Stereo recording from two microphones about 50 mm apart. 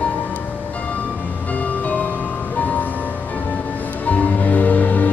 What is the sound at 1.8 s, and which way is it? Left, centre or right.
Music, left.